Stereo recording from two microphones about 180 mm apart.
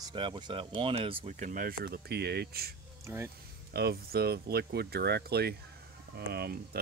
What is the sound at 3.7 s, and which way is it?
Speech, 60° right (ahead or behind).